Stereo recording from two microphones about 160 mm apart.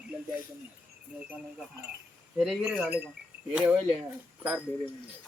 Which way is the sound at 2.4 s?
5° right (ahead or behind).